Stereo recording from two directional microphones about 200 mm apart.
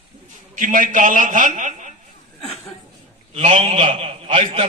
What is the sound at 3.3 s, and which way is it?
A man's voice, 30° right (ahead or behind).